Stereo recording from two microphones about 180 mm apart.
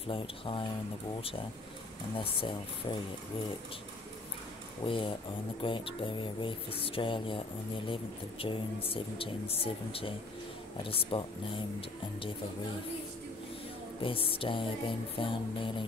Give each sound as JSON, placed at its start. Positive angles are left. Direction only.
{"t": 0.0, "sound": "speech", "side_deg": 30}
{"t": 2.1, "sound": "speech", "side_deg": 25}
{"t": 4.8, "sound": "speech", "side_deg": 30}
{"t": 14.0, "sound": "speech", "side_deg": 30}